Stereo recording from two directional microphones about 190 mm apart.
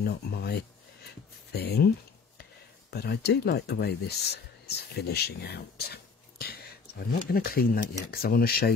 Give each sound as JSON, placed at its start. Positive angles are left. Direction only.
{"t": 0.0, "sound": "speech", "side_deg": 60}
{"t": 2.9, "sound": "speech", "side_deg": 60}